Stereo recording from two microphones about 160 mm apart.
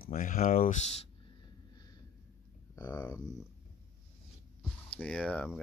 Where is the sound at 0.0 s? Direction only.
55° left (ahead or behind).